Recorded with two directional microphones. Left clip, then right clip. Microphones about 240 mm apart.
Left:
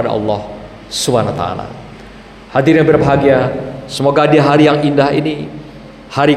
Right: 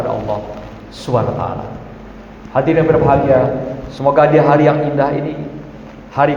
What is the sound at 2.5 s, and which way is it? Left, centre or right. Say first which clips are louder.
A man's voice: left 3 dB; left.